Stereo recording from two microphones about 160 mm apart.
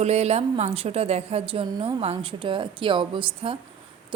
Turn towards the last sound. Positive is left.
turn(degrees=-35)  # may be behind; listen again after turning